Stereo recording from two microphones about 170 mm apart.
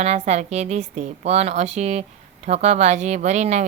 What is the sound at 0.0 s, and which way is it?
A woman's voice, 40° right (ahead or behind).